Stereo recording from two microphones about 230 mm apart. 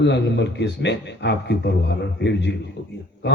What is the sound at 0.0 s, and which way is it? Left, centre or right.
A man's voice, left.